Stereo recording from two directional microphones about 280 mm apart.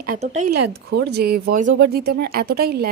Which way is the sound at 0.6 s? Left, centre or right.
Right.